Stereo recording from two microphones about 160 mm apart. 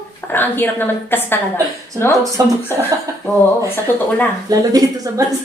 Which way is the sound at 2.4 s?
20° right (ahead or behind).